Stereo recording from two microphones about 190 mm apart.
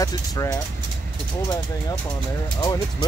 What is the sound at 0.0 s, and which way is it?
Speech, 15° left (ahead or behind).